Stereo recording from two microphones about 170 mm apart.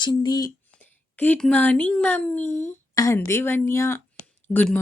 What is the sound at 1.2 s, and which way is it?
Speech, 10° left (ahead or behind).